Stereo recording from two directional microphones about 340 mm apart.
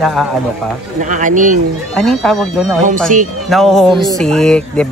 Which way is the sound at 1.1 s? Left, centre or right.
Right.